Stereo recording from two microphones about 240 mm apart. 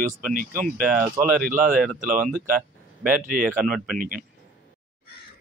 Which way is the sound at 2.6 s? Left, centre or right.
Centre.